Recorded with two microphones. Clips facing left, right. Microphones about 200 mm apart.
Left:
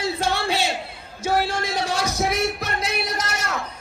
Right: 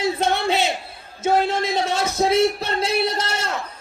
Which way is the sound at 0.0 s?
20° right (ahead or behind).